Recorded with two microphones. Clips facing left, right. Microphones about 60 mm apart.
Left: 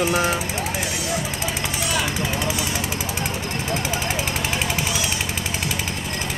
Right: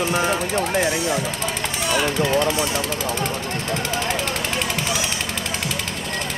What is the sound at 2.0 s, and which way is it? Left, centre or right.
Speech, centre.